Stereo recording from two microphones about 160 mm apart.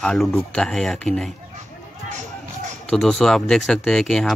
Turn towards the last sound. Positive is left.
turn(degrees=5)  # may be behind; listen again after turning